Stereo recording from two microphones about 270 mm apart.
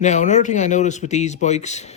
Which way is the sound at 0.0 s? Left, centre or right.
Left.